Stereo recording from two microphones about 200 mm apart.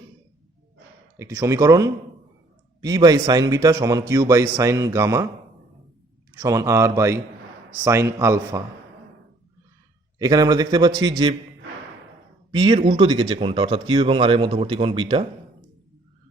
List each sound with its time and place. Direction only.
1.1 s a man's voice: 15° right (ahead or behind)
6.3 s a man's voice: 15° right (ahead or behind)
10.2 s speech: 20° right (ahead or behind)
12.5 s speech: 25° right (ahead or behind)